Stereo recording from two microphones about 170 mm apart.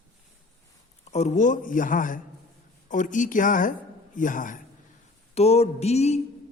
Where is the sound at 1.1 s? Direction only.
45° left (ahead or behind).